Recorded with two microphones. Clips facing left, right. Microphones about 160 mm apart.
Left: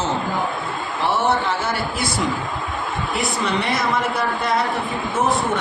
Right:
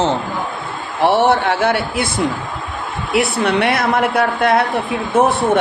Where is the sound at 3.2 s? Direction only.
70° right (ahead or behind).